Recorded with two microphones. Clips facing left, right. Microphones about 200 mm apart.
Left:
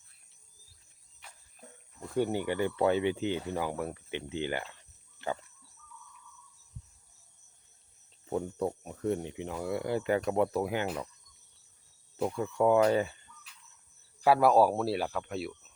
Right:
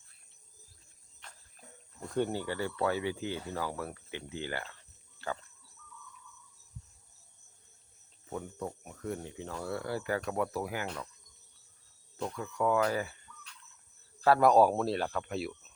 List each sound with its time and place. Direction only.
2.0 s speech: 10° left (ahead or behind)
5.2 s a sound: 20° left (ahead or behind)
8.3 s speech: 30° left (ahead or behind)
12.4 s speech: 25° left (ahead or behind)
14.2 s speech: 10° left (ahead or behind)